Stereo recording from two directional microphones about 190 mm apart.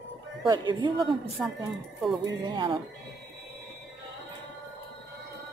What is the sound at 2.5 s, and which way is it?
Speech, 25° right (ahead or behind).